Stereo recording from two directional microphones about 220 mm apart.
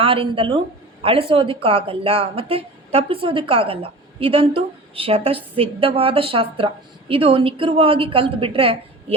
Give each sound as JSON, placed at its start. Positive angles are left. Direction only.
{"t": 0.0, "sound": "a woman's voice", "side_deg": -25}